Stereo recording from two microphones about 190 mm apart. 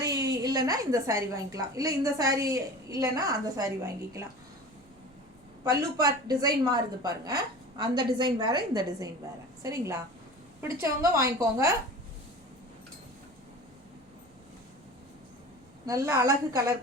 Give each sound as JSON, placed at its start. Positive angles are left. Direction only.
{"t": 0.0, "sound": "a woman's voice", "side_deg": -20}
{"t": 5.6, "sound": "a woman's voice", "side_deg": -20}
{"t": 15.9, "sound": "a woman's voice", "side_deg": -15}